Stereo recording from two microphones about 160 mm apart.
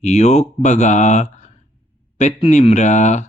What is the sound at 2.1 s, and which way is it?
Mantra, 45° left (ahead or behind).